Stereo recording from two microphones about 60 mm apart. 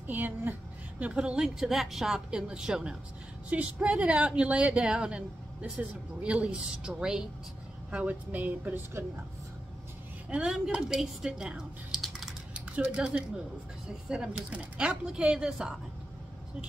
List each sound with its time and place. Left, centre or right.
0.0 s a sound: right
1.0 s speech: centre
7.9 s speech: right
8.7 s speech: right
10.3 s speech: centre
12.5 s typing: centre
14.0 s speech: centre